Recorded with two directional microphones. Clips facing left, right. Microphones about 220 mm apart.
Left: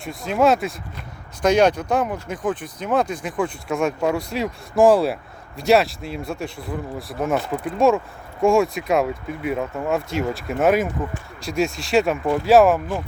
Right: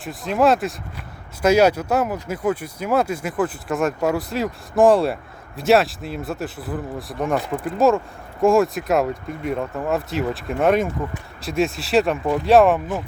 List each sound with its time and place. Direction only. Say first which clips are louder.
0.0 s speech: even; centre (ahead or behind)